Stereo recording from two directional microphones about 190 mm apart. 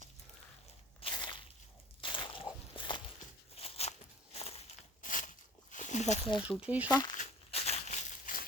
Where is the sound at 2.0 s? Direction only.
25° left (ahead or behind).